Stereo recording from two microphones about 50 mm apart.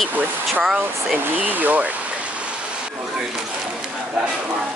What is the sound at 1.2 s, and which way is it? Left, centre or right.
Speech, right.